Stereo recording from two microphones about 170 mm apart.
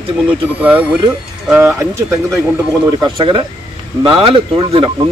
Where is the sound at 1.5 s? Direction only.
15° right (ahead or behind).